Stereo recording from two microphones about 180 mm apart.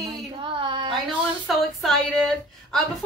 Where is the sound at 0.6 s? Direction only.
25° right (ahead or behind).